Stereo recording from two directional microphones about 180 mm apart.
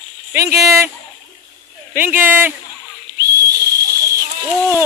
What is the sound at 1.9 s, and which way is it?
Speech, 10° right (ahead or behind).